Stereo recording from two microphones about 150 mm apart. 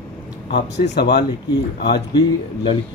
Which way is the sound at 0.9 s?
90° left.